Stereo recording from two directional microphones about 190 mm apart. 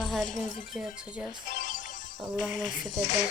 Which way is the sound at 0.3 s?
45° left (ahead or behind).